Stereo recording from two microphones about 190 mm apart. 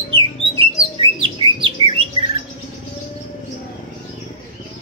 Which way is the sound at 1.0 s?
25° right (ahead or behind).